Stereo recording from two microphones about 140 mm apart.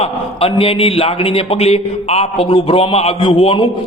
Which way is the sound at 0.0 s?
45° left (ahead or behind).